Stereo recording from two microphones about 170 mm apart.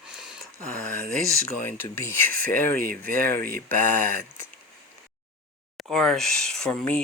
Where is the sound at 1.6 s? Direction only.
15° left (ahead or behind).